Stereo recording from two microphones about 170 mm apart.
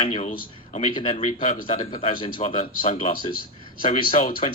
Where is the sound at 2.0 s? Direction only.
30° left (ahead or behind).